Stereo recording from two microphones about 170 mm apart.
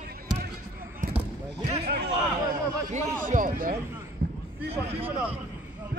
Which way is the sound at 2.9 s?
45° right (ahead or behind).